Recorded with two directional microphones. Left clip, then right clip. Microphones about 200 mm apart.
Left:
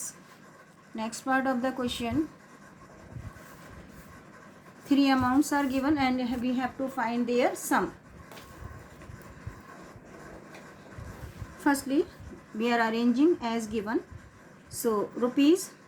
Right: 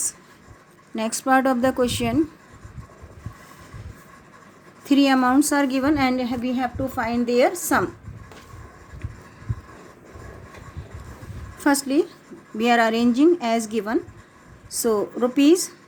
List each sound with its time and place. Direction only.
0.9 s a woman's voice: 55° right (ahead or behind)
4.9 s a woman's voice: 50° right (ahead or behind)
11.6 s a woman's voice: 50° right (ahead or behind)